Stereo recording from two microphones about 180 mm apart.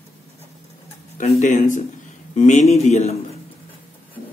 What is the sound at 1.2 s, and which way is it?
A man's voice, 45° left (ahead or behind).